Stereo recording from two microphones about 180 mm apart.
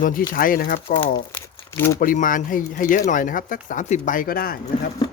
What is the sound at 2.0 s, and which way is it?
Speech, 50° left (ahead or behind).